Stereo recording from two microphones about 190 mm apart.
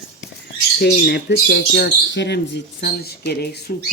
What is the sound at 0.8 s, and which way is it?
Speech, 55° left (ahead or behind).